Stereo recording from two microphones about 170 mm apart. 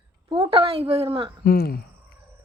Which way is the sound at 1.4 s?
65° left (ahead or behind).